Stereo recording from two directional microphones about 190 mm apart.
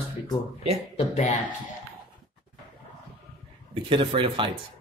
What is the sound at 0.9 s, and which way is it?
Speech, 35° left (ahead or behind).